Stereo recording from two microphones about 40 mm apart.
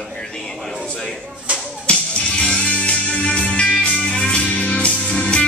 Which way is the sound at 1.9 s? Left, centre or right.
Left.